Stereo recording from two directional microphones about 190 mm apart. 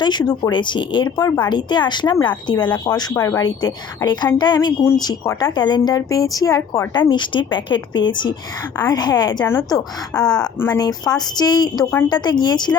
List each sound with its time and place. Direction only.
0.0 s speech: 25° left (ahead or behind)
10.2 s a woman's voice: 5° left (ahead or behind)
10.7 s speech: 20° left (ahead or behind)